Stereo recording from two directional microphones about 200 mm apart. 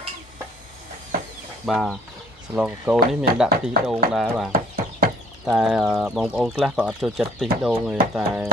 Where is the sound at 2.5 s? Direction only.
5° right (ahead or behind).